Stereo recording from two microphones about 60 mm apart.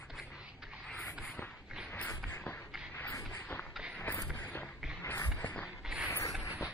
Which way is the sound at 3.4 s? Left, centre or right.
Left.